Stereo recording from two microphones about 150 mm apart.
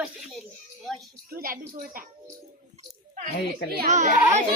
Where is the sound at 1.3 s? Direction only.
80° right.